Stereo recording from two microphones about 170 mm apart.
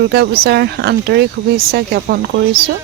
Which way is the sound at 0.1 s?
70° right (ahead or behind).